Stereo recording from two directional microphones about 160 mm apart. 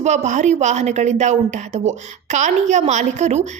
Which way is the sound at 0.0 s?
45° right (ahead or behind).